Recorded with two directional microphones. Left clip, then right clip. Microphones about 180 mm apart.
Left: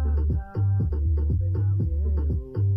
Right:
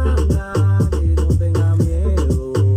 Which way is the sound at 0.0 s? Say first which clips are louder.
Right 15 dB; 45° left (ahead or behind).